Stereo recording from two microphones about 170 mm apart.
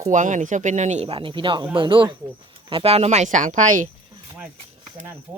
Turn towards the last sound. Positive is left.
turn(degrees=-50)  # may be behind; listen again after turning